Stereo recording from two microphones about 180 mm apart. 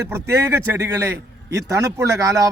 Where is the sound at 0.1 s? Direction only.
15° right (ahead or behind).